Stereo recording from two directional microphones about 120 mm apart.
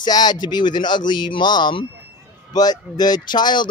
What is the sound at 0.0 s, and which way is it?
Speech, 35° left (ahead or behind).